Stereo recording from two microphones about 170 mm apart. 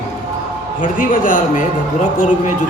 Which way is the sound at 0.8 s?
50° left (ahead or behind).